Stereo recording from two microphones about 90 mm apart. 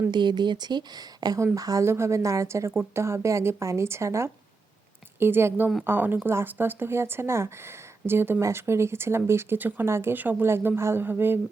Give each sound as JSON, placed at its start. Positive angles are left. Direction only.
{"t": 0.1, "sound": "a woman's voice", "side_deg": -55}